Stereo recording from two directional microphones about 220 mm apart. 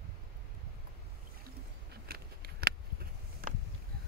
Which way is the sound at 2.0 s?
45° right (ahead or behind).